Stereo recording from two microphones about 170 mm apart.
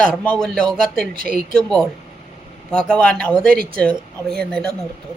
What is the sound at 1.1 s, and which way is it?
Speech, 60° right (ahead or behind).